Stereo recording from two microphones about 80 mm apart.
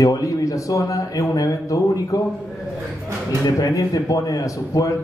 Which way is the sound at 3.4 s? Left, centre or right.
Left.